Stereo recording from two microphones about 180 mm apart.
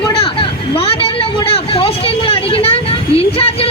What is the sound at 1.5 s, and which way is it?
Vehicle, 30° left (ahead or behind).